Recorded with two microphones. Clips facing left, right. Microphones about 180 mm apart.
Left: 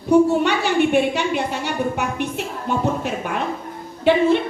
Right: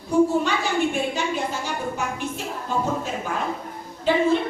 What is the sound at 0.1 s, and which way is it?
A woman's voice, 70° left (ahead or behind).